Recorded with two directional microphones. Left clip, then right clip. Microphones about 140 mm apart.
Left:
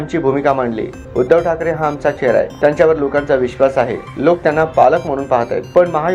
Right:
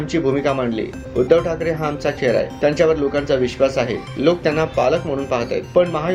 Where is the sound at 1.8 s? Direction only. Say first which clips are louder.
Left 6 dB; 10° right (ahead or behind).